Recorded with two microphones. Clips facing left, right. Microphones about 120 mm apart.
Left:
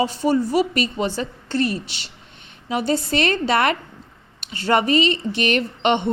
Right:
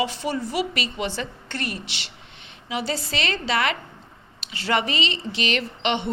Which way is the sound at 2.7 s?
50° left (ahead or behind).